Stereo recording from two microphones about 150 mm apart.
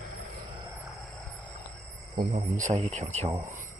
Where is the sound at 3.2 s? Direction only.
20° right (ahead or behind).